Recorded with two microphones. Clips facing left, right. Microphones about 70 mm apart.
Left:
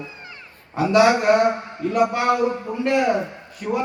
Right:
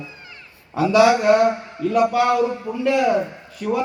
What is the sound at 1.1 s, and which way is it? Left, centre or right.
A man's voice, centre.